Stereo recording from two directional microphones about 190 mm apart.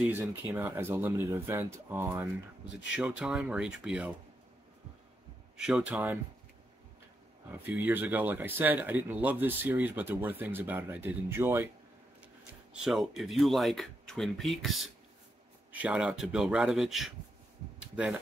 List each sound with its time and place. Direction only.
0.0 s speech: 10° right (ahead or behind)
2.6 s speech: 70° left (ahead or behind)
3.0 s speech: 5° right (ahead or behind)
5.6 s speech: 5° right (ahead or behind)
7.5 s speech: 10° right (ahead or behind)
12.8 s speech: centre (ahead or behind)